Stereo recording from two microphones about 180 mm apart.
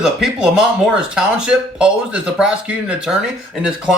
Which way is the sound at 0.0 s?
5° right (ahead or behind).